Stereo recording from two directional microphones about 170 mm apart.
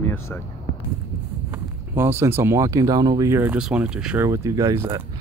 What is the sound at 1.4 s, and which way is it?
Speech, 15° right (ahead or behind).